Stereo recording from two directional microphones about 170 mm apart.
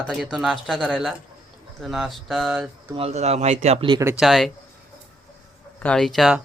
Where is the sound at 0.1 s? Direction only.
Centre (ahead or behind).